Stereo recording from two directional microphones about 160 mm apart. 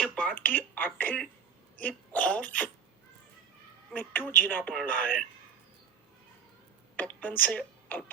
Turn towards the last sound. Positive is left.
turn(degrees=10)  # may be behind; listen again after turning